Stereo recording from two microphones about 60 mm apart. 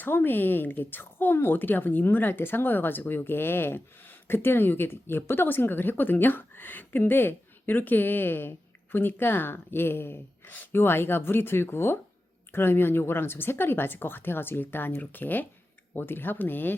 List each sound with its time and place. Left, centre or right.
0.0 s speech: left